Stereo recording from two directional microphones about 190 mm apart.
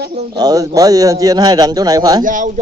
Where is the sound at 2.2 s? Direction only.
45° right (ahead or behind).